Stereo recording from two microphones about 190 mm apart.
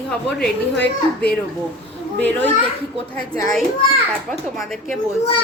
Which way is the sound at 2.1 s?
10° left (ahead or behind).